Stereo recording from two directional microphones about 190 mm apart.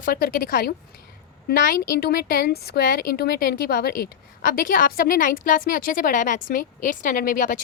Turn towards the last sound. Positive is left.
turn(degrees=45)  # may be behind; listen again after turning